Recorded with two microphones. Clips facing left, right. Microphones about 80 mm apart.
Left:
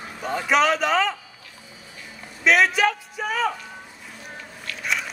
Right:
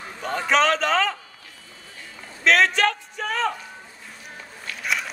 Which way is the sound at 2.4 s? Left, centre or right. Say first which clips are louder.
Even; centre.